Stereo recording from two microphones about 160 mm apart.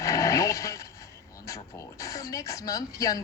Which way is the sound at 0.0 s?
20° left (ahead or behind).